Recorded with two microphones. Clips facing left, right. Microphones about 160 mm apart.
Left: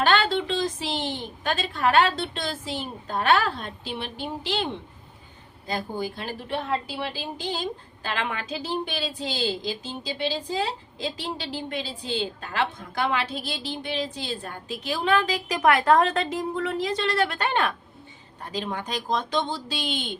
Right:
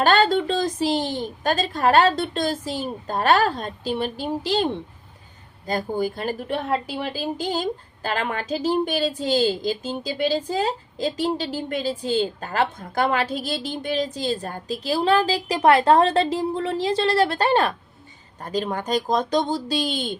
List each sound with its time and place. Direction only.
0.0 s a woman's voice: 40° right (ahead or behind)